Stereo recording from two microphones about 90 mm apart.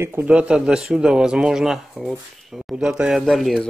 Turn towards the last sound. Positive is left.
turn(degrees=0)  # may be behind; listen again after turning